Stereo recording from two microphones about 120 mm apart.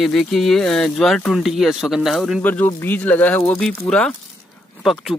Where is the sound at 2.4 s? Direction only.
15° left (ahead or behind).